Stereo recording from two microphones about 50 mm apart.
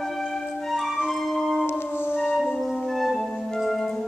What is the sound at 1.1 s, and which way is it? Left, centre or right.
Music, centre.